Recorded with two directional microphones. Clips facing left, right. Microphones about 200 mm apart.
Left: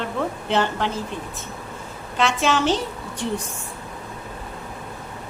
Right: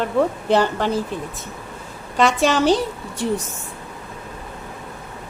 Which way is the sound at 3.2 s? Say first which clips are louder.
Right 4 dB; 5° right (ahead or behind).